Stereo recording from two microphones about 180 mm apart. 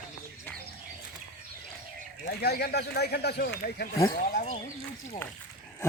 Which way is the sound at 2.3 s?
60° left (ahead or behind).